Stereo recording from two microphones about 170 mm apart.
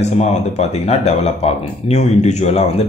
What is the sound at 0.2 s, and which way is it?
Speech, 40° left (ahead or behind).